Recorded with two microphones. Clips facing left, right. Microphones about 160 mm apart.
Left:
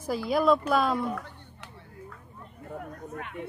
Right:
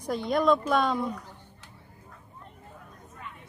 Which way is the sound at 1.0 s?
65° left (ahead or behind).